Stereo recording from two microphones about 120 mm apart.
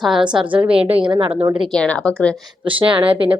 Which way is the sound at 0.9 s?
45° right (ahead or behind).